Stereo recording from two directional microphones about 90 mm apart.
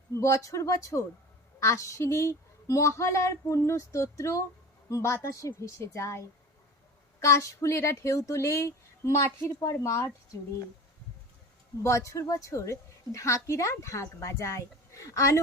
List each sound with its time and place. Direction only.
0.1 s speech: 35° left (ahead or behind)
11.8 s speech: 35° left (ahead or behind)